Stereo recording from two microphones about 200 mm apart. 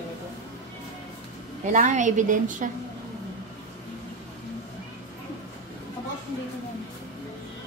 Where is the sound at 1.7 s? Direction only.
40° right (ahead or behind).